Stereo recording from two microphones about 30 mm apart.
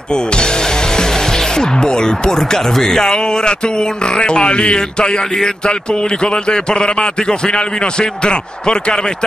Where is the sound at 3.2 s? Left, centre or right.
Left.